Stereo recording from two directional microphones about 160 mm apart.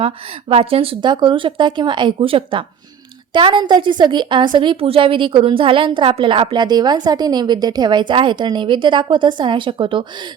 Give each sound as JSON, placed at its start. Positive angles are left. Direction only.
{"t": 0.0, "sound": "a woman's voice", "side_deg": -35}